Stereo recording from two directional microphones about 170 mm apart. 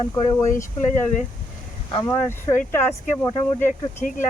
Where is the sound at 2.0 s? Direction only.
15° left (ahead or behind).